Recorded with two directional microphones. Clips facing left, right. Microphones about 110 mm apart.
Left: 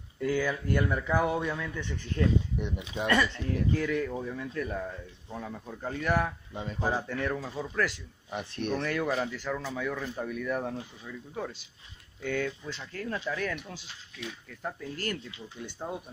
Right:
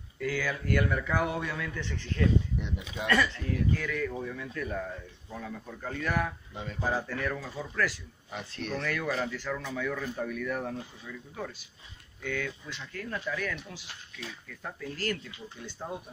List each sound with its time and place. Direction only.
0.2 s a man's voice: 20° left (ahead or behind)